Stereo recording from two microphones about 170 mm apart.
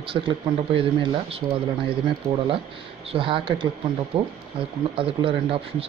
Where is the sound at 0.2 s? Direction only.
30° right (ahead or behind).